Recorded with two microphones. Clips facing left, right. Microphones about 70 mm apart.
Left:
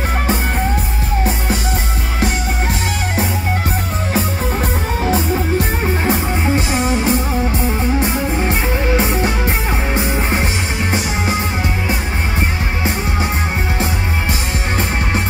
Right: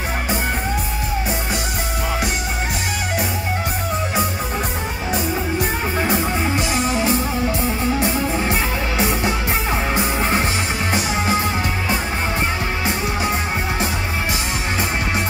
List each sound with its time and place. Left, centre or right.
6.0 s music: left
8.9 s music: left